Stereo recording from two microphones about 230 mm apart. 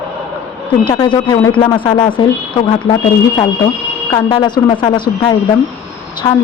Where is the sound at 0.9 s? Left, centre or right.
Left.